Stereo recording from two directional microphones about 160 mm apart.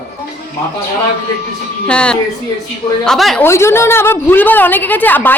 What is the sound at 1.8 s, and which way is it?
A woman's voice, 5° left (ahead or behind).